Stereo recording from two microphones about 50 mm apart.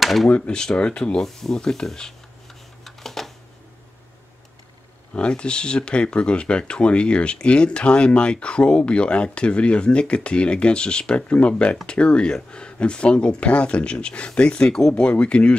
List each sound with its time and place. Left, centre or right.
0.0 s speech: centre
0.3 s speech: centre
1.2 s speech: centre
2.8 s a sound: centre
5.1 s speech: left